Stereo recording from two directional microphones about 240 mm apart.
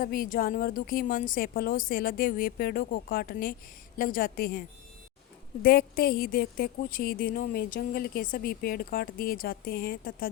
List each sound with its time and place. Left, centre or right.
0.0 s speech: left
5.6 s speech: left